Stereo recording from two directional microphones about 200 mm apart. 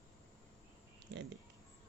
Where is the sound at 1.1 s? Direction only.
60° right (ahead or behind).